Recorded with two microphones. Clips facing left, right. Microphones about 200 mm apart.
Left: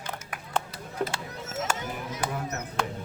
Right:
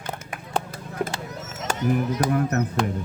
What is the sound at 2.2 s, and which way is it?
Music, 40° right (ahead or behind).